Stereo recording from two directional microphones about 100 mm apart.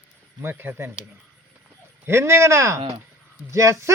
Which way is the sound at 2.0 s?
25° right (ahead or behind).